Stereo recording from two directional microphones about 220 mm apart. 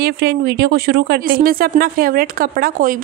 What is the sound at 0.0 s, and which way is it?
Speech, 50° right (ahead or behind).